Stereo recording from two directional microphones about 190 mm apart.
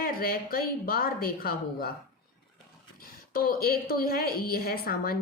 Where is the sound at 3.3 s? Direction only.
50° left (ahead or behind).